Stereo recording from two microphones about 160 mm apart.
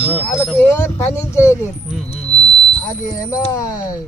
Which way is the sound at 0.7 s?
15° left (ahead or behind).